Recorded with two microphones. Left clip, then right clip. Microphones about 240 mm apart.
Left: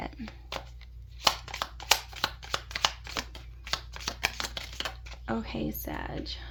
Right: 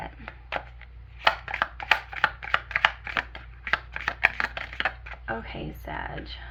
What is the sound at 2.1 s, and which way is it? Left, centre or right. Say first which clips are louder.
Shuffling cards: right 8 dB; left.